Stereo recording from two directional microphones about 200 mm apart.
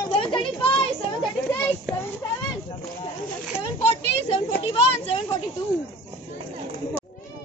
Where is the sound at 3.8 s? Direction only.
30° left (ahead or behind).